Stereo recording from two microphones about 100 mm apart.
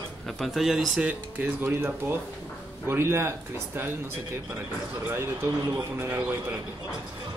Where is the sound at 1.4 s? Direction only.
20° right (ahead or behind).